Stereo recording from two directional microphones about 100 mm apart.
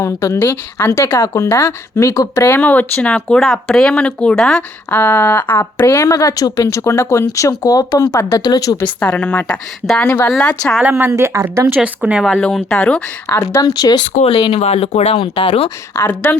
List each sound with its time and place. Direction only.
0.0 s speech: 30° left (ahead or behind)
0.4 s speech: 20° left (ahead or behind); by 2.5 s 35° left (ahead or behind)
2.5 s speech: 15° left (ahead or behind)
4.9 s speech: 20° left (ahead or behind)
6.1 s speech: 35° left (ahead or behind)
8.8 s speech: 15° left (ahead or behind)
10.8 s speech: 25° right (ahead or behind)
11.8 s speech: 10° right (ahead or behind)
12.3 s speech: 10° left (ahead or behind)
13.2 s speech: 30° left (ahead or behind)
14.4 s speech: 80° left
16.0 s speech: 20° left (ahead or behind)